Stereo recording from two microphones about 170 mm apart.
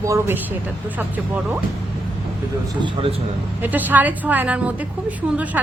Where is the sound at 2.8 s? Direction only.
35° right (ahead or behind).